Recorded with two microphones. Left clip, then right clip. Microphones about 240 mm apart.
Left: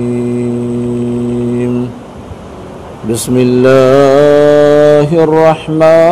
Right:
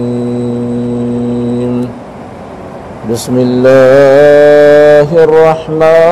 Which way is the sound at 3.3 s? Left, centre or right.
Left.